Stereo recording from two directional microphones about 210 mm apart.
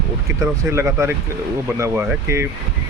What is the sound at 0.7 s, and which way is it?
Speech, 10° right (ahead or behind).